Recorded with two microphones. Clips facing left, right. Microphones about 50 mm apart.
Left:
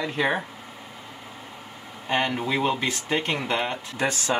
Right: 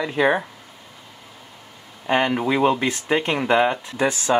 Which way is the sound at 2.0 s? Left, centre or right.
Centre.